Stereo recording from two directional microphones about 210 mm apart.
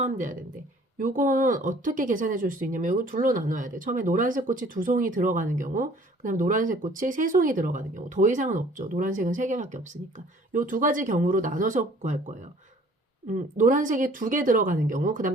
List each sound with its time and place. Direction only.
0.0 s speech: 35° right (ahead or behind)